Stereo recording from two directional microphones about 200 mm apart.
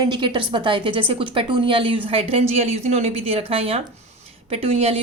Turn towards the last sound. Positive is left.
turn(degrees=-30)  # may be behind; listen again after turning